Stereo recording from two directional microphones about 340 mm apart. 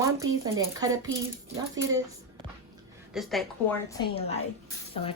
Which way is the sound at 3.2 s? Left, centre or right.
Centre.